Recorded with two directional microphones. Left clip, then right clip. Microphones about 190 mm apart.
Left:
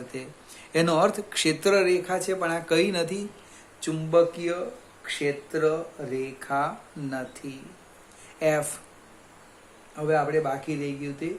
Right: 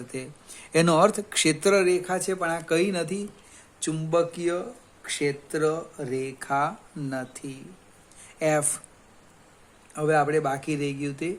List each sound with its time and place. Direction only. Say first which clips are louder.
0.1 s speech: right 1 dB; 35° right (ahead or behind)
3.8 s speech: left 3 dB; 35° right (ahead or behind)
9.9 s speech: right 2 dB; 55° right (ahead or behind)